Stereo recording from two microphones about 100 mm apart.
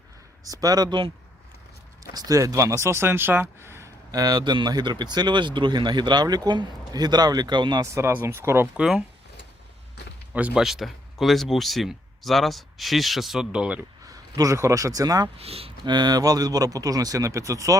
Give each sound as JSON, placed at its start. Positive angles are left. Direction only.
{"t": 0.4, "sound": "speech", "side_deg": -40}
{"t": 2.1, "sound": "speech", "side_deg": -35}
{"t": 4.1, "sound": "speech", "side_deg": -40}
{"t": 7.9, "sound": "speech", "side_deg": -25}
{"t": 8.7, "sound": "speech", "side_deg": -10}
{"t": 10.3, "sound": "speech", "side_deg": -10}
{"t": 14.1, "sound": "speech", "side_deg": -35}
{"t": 15.4, "sound": "speech", "side_deg": -80}
{"t": 15.9, "sound": "speech", "side_deg": -45}